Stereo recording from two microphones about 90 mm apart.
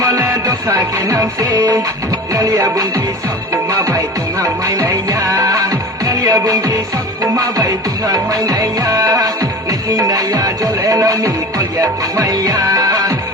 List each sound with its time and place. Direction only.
0.0 s music: 40° right (ahead or behind)